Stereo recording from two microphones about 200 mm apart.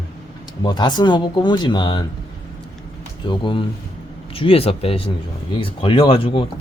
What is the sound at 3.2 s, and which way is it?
Speech, 25° left (ahead or behind).